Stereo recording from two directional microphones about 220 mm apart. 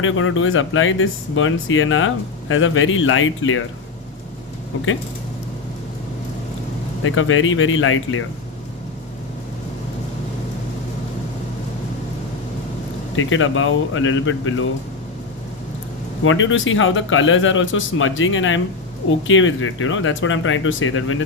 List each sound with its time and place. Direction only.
0.0 s speech: 65° left (ahead or behind)
7.0 s speech: 65° left (ahead or behind)
13.1 s speech: 65° left (ahead or behind)
16.2 s speech: 60° left (ahead or behind)